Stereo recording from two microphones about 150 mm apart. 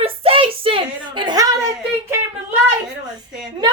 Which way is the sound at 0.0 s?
40° right (ahead or behind).